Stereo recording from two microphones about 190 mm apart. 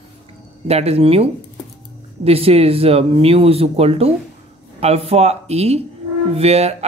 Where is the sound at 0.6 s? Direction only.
35° right (ahead or behind).